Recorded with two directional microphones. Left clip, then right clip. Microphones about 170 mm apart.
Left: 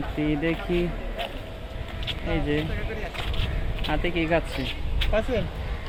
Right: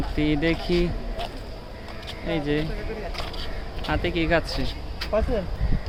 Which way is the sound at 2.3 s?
10° right (ahead or behind).